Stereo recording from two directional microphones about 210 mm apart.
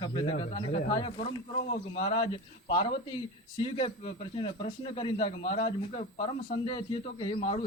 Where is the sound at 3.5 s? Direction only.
25° left (ahead or behind).